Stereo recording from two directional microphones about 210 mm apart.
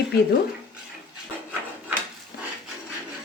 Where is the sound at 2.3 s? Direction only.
50° left (ahead or behind).